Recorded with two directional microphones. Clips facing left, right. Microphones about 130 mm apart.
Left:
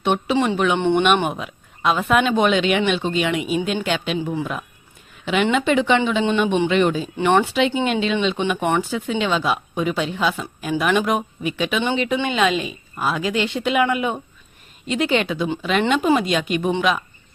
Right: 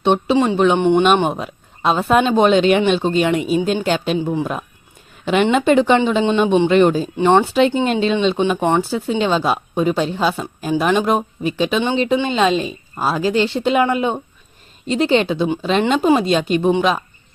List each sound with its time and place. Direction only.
0.0 s a woman's voice: 30° right (ahead or behind)
0.8 s speech: 15° right (ahead or behind)
1.2 s speech: 35° right (ahead or behind)
4.2 s speech: 20° right (ahead or behind)
5.2 s speech: 40° right (ahead or behind)
7.2 s speech: 25° right (ahead or behind)
7.4 s speech: 40° right (ahead or behind)